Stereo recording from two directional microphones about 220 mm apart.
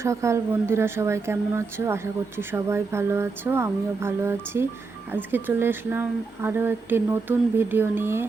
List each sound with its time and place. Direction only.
0.0 s speech: 15° right (ahead or behind)